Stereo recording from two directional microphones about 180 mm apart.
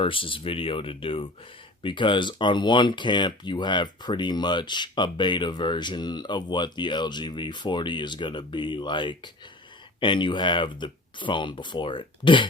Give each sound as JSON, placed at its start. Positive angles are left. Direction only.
{"t": 0.0, "sound": "speech", "side_deg": 30}